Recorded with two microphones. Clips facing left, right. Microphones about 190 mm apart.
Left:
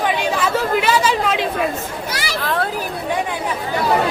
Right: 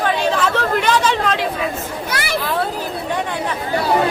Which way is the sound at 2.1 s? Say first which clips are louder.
Right 6 dB; 55° right (ahead or behind).